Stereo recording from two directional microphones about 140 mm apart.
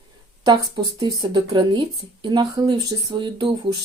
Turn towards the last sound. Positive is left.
turn(degrees=-35)  # may be behind; listen again after turning